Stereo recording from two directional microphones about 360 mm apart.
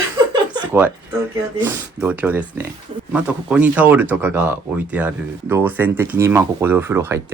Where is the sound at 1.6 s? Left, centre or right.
Centre.